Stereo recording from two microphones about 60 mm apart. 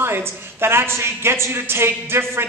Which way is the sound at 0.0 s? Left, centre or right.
Right.